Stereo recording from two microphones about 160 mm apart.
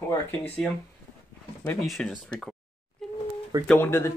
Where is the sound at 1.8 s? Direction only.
Centre (ahead or behind).